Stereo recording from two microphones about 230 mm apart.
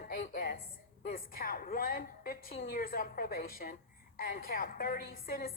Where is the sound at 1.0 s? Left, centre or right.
Left.